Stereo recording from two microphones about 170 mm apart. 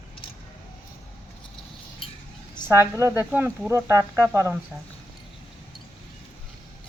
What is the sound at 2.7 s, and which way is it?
Speech, 15° right (ahead or behind).